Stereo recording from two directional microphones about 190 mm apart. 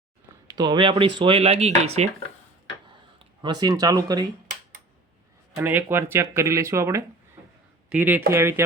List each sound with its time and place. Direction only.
0.4 s speech: 20° right (ahead or behind)
3.4 s speech: 20° right (ahead or behind)
5.5 s speech: 10° right (ahead or behind)